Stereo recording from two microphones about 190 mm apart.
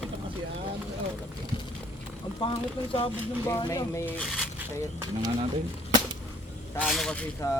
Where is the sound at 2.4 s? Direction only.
25° left (ahead or behind).